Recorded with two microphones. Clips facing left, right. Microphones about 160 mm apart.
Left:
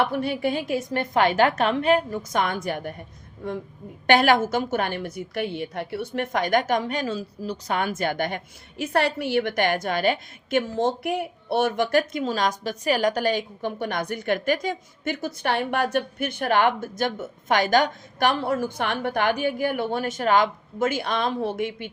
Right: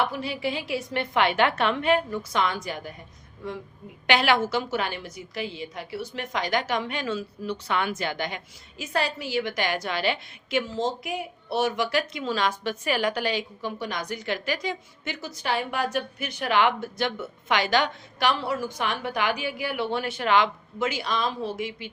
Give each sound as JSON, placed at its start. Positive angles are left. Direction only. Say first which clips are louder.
{"t": 0.0, "sound": "a woman's voice", "louder": "left 4 dB", "side_deg": 55}
{"t": 4.0, "sound": "a woman's voice", "louder": "left 4 dB", "side_deg": 50}
{"t": 8.8, "sound": "a woman's voice", "louder": "left 5 dB", "side_deg": 60}